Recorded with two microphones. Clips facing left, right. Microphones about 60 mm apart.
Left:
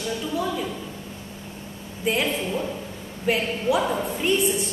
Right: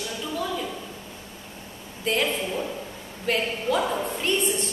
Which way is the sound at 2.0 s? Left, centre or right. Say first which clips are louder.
Left 1 dB; centre.